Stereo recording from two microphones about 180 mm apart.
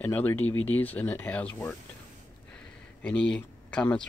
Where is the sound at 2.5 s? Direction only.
5° left (ahead or behind).